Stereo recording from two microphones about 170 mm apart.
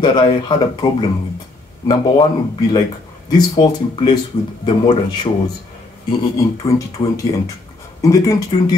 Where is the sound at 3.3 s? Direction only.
25° left (ahead or behind).